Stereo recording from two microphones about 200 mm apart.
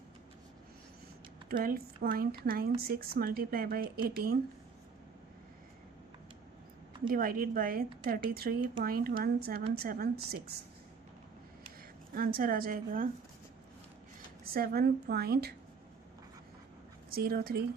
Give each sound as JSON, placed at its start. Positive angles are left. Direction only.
{"t": 1.5, "sound": "a woman's voice", "side_deg": -45}
{"t": 7.1, "sound": "a woman's voice", "side_deg": -45}
{"t": 12.1, "sound": "a woman's voice", "side_deg": -45}
{"t": 14.5, "sound": "a woman's voice", "side_deg": -50}
{"t": 17.1, "sound": "a woman's voice", "side_deg": -50}